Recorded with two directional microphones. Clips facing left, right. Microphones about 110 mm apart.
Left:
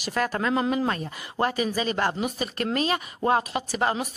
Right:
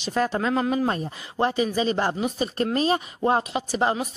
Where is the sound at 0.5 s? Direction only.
Centre (ahead or behind).